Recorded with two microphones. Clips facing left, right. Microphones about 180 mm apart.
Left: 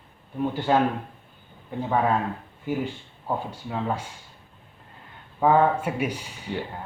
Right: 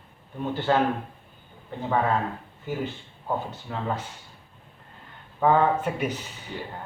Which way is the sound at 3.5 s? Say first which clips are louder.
Left 2 dB; 10° left (ahead or behind).